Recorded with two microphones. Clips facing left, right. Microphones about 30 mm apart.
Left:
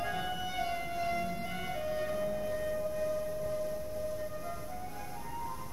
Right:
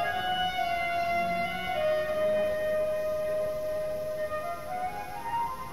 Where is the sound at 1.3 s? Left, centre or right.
Right.